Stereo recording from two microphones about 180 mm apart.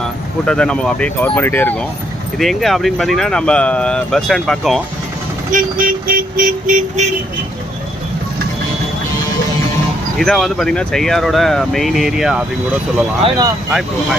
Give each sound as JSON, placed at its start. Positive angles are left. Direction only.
{"t": 0.4, "sound": "speech", "side_deg": 5}
{"t": 5.5, "sound": "speech", "side_deg": -50}
{"t": 10.2, "sound": "speech", "side_deg": 0}
{"t": 13.7, "sound": "speech", "side_deg": 0}